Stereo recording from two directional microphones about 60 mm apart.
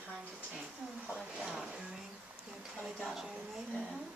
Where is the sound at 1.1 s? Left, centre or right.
Centre.